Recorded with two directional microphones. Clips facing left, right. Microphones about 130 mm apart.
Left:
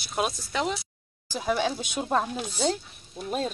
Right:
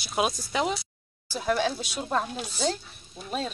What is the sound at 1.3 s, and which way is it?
Speech, 10° left (ahead or behind).